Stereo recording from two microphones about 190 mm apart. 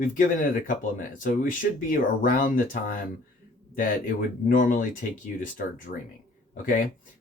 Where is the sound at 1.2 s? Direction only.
45° left (ahead or behind).